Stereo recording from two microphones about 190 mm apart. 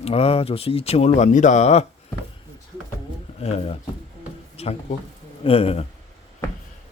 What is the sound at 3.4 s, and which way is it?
Speech, 35° left (ahead or behind).